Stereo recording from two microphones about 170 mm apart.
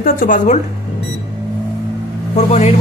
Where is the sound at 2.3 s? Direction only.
40° left (ahead or behind).